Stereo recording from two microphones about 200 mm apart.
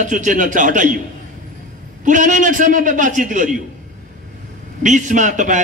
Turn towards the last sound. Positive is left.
turn(degrees=-40)  # may be behind; listen again after turning